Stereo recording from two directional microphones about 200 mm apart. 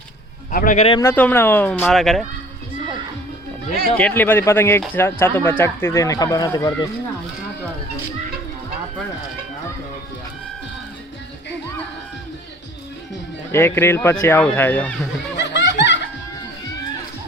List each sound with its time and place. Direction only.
0.5 s speech: 40° left (ahead or behind)
1.0 s speech: 10° left (ahead or behind)
3.9 s speech: 10° left (ahead or behind)
13.5 s speech: 10° left (ahead or behind)
15.4 s laughter: 60° left (ahead or behind)